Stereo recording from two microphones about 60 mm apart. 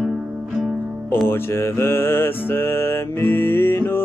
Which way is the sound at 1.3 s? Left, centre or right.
Left.